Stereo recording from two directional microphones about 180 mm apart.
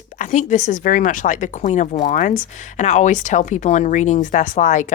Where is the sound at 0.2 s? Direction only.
45° left (ahead or behind).